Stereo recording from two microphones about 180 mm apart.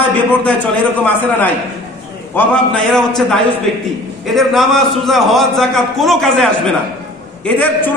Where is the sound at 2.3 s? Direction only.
5° left (ahead or behind).